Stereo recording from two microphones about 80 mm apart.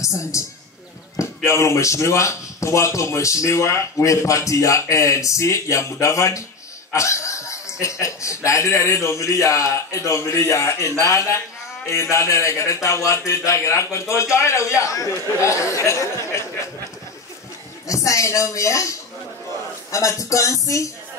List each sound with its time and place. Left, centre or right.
0.0 s a woman's voice: left
17.8 s speech: left